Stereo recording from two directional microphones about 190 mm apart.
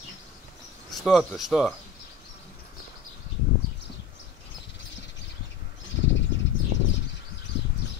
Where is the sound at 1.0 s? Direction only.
Centre (ahead or behind).